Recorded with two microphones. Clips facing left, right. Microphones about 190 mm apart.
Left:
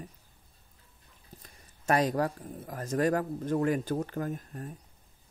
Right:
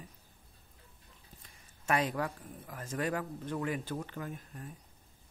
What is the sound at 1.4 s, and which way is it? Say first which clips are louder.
Speech: left 3 dB; 40° left (ahead or behind).